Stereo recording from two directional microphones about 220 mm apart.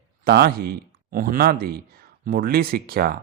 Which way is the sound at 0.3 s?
45° right (ahead or behind).